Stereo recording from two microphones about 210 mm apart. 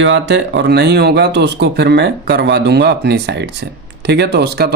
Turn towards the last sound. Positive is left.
turn(degrees=-50)  # may be behind; listen again after turning